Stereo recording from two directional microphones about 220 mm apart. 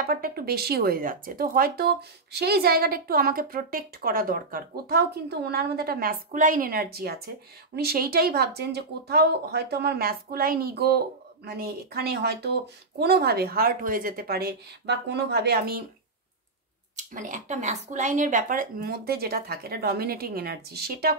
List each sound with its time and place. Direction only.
0.1 s speech: 45° right (ahead or behind)
16.9 s speech: 35° right (ahead or behind)